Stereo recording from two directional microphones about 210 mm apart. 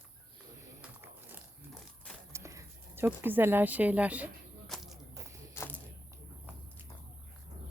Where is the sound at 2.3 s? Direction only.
15° right (ahead or behind).